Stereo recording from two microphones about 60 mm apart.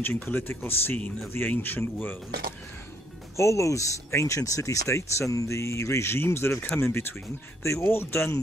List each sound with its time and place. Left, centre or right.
0.0 s speech: left
3.3 s speech: left